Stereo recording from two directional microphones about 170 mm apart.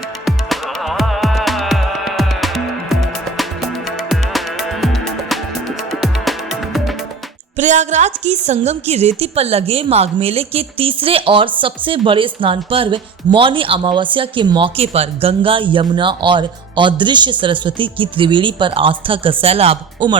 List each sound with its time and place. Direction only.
0.3 s music: centre (ahead or behind)
7.5 s a woman's voice: 45° right (ahead or behind)